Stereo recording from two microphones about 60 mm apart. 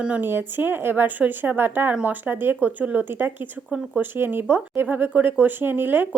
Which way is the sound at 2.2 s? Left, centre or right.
Right.